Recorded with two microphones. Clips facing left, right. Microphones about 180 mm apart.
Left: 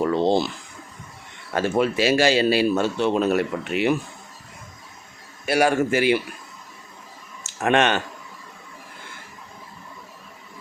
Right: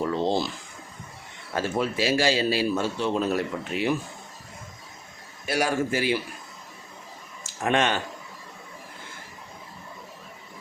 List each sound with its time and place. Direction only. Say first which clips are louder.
0.0 s a sound: left 5 dB; 65° left (ahead or behind)
1.5 s a man's voice: left 5 dB; 70° left (ahead or behind)
5.5 s a man's voice: left 6 dB; 65° left (ahead or behind)
7.6 s a man's voice: left 4 dB; 70° left (ahead or behind)